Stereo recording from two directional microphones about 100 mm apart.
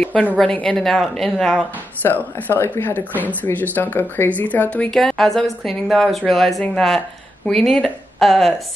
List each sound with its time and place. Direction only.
0.0 s a woman's voice: 15° left (ahead or behind)
2.0 s speech: 20° left (ahead or behind)
4.9 s a woman's voice: 5° left (ahead or behind)